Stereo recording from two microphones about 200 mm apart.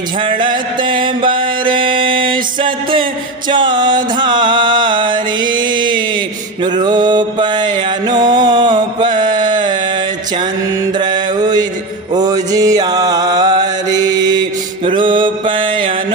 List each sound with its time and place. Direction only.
0.2 s music: 25° right (ahead or behind)
6.6 s mantra: 20° right (ahead or behind)
10.9 s mantra: 20° right (ahead or behind)
12.1 s music: 20° right (ahead or behind)
14.8 s mantra: 25° right (ahead or behind)